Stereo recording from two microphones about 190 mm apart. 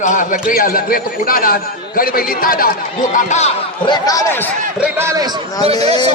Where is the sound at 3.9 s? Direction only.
20° left (ahead or behind).